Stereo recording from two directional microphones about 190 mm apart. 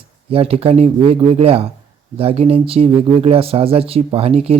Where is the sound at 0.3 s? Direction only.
30° right (ahead or behind).